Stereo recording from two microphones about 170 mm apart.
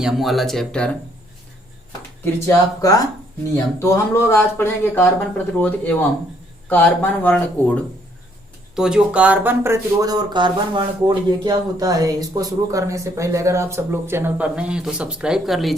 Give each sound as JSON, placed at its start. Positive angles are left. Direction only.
{"t": 0.0, "sound": "speech", "side_deg": 0}
{"t": 2.2, "sound": "speech", "side_deg": 15}
{"t": 8.7, "sound": "speech", "side_deg": -5}